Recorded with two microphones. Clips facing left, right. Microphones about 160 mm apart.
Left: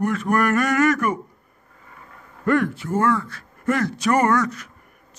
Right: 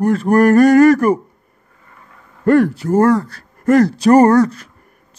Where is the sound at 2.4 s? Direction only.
35° right (ahead or behind).